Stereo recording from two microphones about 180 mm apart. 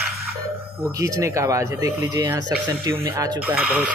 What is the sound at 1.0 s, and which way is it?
Speech, 15° right (ahead or behind).